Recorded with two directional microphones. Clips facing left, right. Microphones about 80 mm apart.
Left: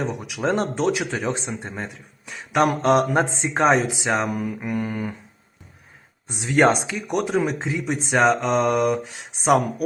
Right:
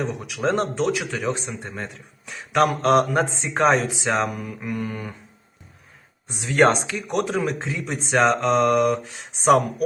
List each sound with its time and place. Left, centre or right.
0.3 s speech: centre
1.8 s speech: centre
2.6 s speech: left
6.5 s speech: centre